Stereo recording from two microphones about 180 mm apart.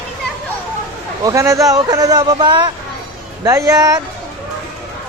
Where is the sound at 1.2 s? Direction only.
20° right (ahead or behind).